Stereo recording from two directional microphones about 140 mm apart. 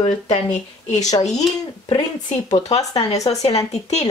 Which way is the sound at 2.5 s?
50° left (ahead or behind).